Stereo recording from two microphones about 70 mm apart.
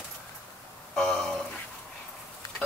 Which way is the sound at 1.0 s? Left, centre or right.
Centre.